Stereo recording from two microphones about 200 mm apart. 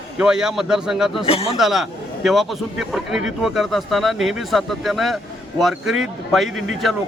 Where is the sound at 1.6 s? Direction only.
Centre (ahead or behind).